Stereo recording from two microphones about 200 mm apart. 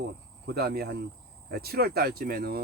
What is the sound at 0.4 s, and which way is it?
Speech, 50° right (ahead or behind).